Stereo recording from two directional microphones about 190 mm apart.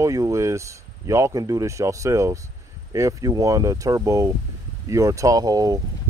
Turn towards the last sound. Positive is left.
turn(degrees=-20)  # may be behind; listen again after turning